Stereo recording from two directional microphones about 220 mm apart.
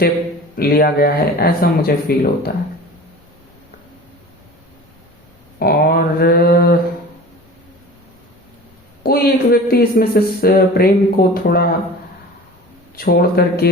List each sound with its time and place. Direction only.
0.5 s speech: 45° left (ahead or behind)
5.5 s speech: 45° left (ahead or behind)
9.0 s speech: 45° left (ahead or behind)
13.0 s speech: 45° left (ahead or behind)